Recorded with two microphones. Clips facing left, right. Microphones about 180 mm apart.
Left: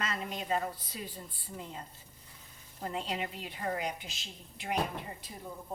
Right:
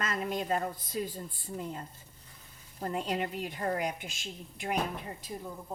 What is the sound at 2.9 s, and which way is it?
A woman's voice, 45° right (ahead or behind).